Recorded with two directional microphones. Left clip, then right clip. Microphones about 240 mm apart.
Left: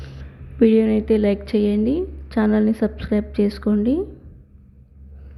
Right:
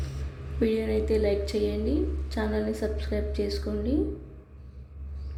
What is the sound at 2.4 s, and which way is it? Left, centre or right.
A woman's voice, centre.